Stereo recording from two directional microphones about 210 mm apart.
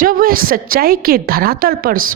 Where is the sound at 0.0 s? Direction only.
45° right (ahead or behind).